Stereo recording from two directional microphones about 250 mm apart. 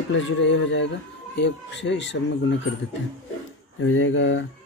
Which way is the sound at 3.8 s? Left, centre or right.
Left.